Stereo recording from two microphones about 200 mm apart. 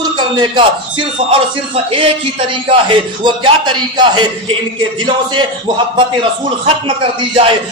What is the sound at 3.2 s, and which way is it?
Speech, 25° right (ahead or behind).